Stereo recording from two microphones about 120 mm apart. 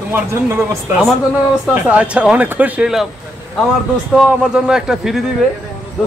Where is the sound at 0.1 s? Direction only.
20° right (ahead or behind).